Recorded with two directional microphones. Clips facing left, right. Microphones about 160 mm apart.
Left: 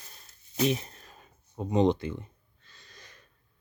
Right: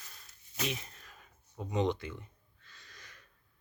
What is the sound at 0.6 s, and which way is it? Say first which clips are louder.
Speech: left 10 dB; 30° left (ahead or behind).